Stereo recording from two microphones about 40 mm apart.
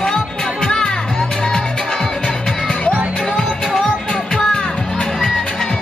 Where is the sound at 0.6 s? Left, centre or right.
Centre.